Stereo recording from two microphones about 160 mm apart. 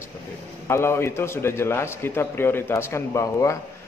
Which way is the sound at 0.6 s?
15° left (ahead or behind).